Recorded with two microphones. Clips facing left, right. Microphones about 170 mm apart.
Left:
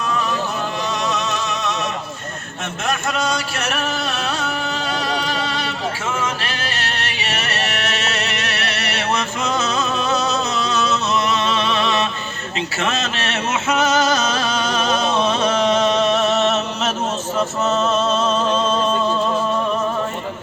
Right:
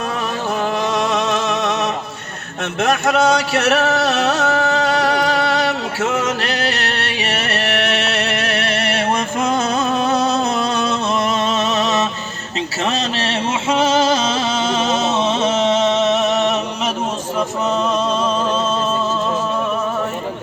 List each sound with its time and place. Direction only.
0.9 s music: 50° right (ahead or behind)
2.8 s a sound: 65° right (ahead or behind); by 12.0 s 40° right (ahead or behind)
12.8 s music: 35° right (ahead or behind); by 16.9 s 15° right (ahead or behind)